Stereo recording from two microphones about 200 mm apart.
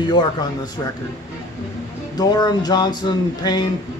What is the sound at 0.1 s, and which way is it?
Speech, 20° left (ahead or behind).